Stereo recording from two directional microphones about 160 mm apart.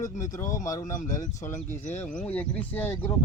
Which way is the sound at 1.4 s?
15° left (ahead or behind).